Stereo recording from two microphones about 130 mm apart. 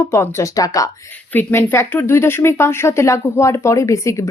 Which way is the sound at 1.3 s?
15° left (ahead or behind).